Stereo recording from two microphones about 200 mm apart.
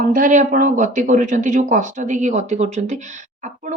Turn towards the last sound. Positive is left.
turn(degrees=-35)  # may be behind; listen again after turning